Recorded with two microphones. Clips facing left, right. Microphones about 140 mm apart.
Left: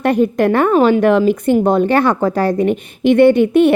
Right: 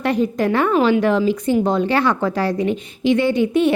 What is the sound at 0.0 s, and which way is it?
A woman's voice, 55° left (ahead or behind).